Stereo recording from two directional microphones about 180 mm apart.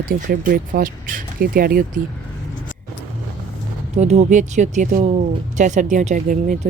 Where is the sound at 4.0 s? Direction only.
40° right (ahead or behind).